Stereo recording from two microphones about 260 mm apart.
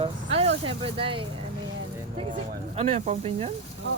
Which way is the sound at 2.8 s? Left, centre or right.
Right.